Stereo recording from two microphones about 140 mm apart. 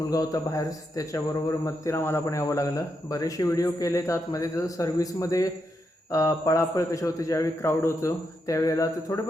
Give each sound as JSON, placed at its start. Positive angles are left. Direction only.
{"t": 0.1, "sound": "a man's voice", "side_deg": 25}